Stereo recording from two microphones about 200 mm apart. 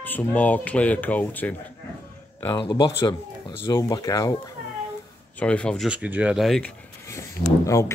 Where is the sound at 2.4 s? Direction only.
20° left (ahead or behind).